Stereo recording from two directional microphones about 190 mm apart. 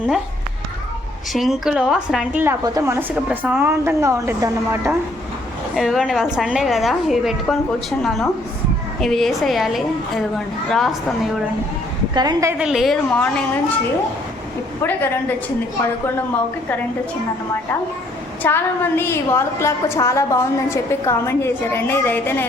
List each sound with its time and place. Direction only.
1.3 s a woman's voice: centre (ahead or behind)
5.7 s a woman's voice: centre (ahead or behind)
12.1 s a woman's voice: 20° right (ahead or behind)
12.6 s a woman's voice: centre (ahead or behind)
14.8 s a woman's voice: 10° left (ahead or behind)
18.4 s a woman's voice: 10° left (ahead or behind)